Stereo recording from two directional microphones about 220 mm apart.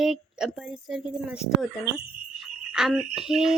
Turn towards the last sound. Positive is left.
turn(degrees=0)  # may be behind; listen again after turning